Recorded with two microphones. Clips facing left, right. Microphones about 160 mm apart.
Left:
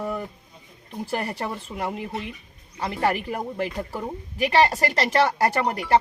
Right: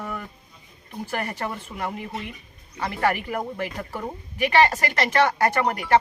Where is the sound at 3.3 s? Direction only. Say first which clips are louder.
Left 1 dB; 30° left (ahead or behind).